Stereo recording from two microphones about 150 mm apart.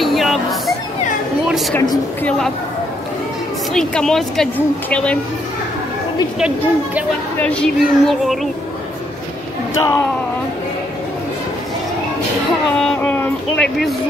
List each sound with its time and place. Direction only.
0.0 s music: centre (ahead or behind)
1.5 s a woman's voice: centre (ahead or behind)
2.2 s child singing: 5° left (ahead or behind)
3.7 s child singing: 5° left (ahead or behind)
4.8 s speech: 10° left (ahead or behind)
6.4 s a woman's voice: 10° right (ahead or behind)
7.4 s child singing: 5° left (ahead or behind)
9.8 s speech: 20° left (ahead or behind)
12.7 s speech: 5° left (ahead or behind)